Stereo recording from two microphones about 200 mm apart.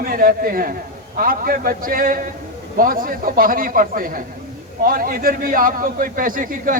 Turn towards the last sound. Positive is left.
turn(degrees=-45)  # may be behind; listen again after turning